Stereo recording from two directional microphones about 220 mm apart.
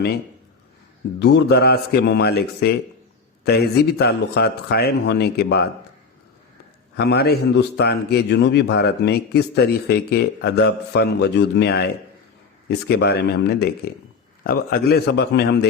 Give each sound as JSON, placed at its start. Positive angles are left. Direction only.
{"t": 1.2, "sound": "a man's voice", "side_deg": 50}
{"t": 6.9, "sound": "a man's voice", "side_deg": 50}